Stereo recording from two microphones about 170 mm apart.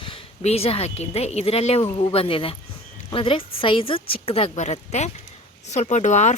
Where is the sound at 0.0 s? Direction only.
35° left (ahead or behind).